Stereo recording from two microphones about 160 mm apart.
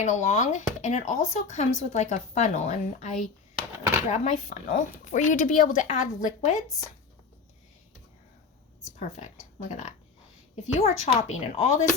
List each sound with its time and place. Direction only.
0.0 s speech: 45° left (ahead or behind)
8.8 s speech: 50° left (ahead or behind)